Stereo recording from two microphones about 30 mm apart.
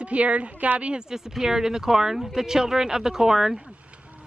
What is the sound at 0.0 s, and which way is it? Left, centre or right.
Speech, right.